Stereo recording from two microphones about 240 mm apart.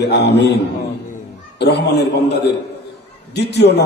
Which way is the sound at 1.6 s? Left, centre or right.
Left.